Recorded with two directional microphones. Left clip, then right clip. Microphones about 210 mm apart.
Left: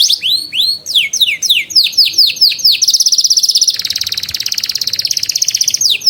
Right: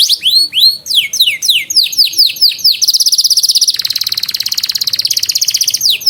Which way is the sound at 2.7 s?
20° right (ahead or behind).